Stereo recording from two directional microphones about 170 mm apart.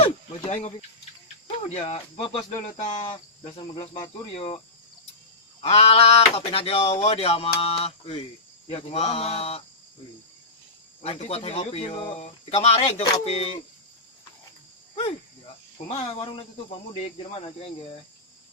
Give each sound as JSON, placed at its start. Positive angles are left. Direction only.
{"t": 0.0, "sound": "cricket", "side_deg": 35}
{"t": 1.5, "sound": "speech", "side_deg": 35}
{"t": 5.6, "sound": "speech", "side_deg": 35}
{"t": 11.0, "sound": "speech", "side_deg": 40}
{"t": 15.9, "sound": "speech", "side_deg": 35}